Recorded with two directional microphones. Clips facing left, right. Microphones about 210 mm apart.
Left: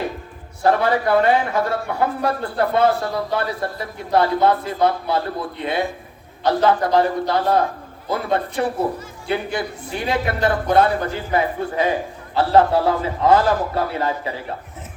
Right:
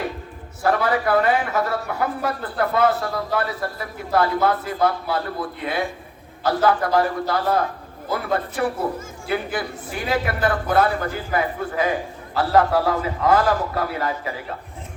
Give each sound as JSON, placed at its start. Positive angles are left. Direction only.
{"t": 0.6, "sound": "a man's voice", "side_deg": 25}